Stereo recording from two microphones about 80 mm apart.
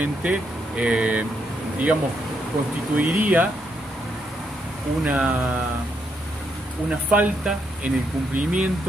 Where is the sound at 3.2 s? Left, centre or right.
Centre.